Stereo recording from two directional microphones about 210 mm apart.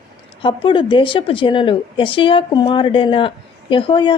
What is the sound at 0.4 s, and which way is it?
A woman's voice, 25° left (ahead or behind).